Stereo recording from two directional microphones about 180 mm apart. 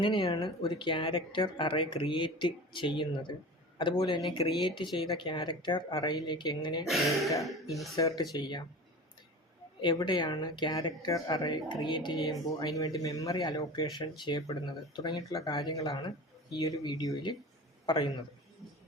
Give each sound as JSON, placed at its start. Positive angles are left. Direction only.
{"t": 0.0, "sound": "speech", "side_deg": 25}
{"t": 6.8, "sound": "speech", "side_deg": 0}
{"t": 7.9, "sound": "speech", "side_deg": 20}
{"t": 9.8, "sound": "speech", "side_deg": 25}